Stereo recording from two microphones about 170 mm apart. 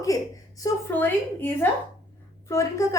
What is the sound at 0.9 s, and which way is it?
Speech, 10° left (ahead or behind).